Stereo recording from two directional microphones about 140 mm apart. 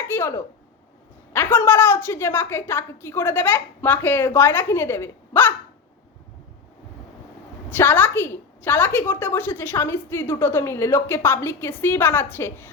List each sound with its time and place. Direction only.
0.1 s a woman's voice: 20° left (ahead or behind)
7.7 s a woman's voice: 15° left (ahead or behind)